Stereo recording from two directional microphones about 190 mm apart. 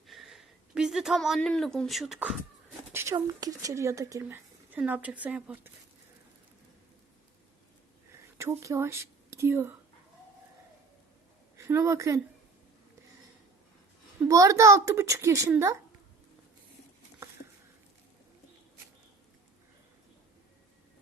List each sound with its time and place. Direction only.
0.1 s a woman's voice: centre (ahead or behind)
2.9 s a sound: 15° right (ahead or behind)
3.2 s speech: 20° right (ahead or behind)
8.4 s speech: 15° right (ahead or behind)
11.5 s a woman's voice: 15° right (ahead or behind)
14.2 s speech: 15° right (ahead or behind)